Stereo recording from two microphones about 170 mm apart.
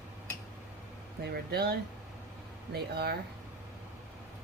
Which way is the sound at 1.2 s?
70° right (ahead or behind).